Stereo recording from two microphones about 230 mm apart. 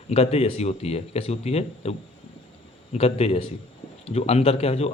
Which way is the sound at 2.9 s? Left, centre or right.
Left.